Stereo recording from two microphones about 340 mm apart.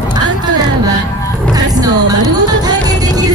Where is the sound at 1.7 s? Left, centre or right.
Centre.